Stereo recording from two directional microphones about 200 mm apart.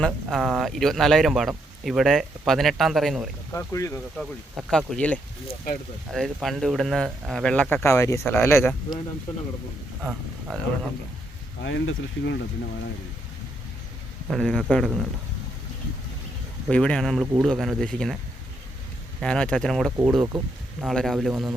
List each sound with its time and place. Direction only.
0.0 s speech: centre (ahead or behind)
3.5 s speech: 15° left (ahead or behind)
4.2 s speech: centre (ahead or behind)
10.0 s speech: 5° right (ahead or behind)
11.6 s speech: 65° left (ahead or behind)
14.3 s speech: centre (ahead or behind)
16.6 s speech: 5° left (ahead or behind)
19.2 s speech: 5° left (ahead or behind)
20.0 s speech: 10° right (ahead or behind)
20.8 s speech: centre (ahead or behind)